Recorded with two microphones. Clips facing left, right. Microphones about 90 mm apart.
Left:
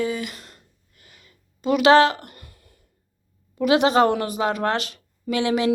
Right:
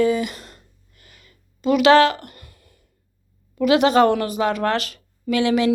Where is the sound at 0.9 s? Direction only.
20° left (ahead or behind).